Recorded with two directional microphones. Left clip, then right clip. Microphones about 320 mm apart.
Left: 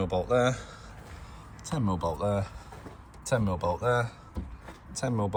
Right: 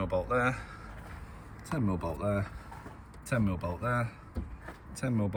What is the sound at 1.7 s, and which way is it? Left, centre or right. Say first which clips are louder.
Speech: left 3 dB; centre.